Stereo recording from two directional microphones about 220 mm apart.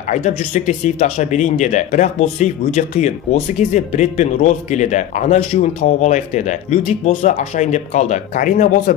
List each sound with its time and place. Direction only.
0.1 s speech: 30° left (ahead or behind)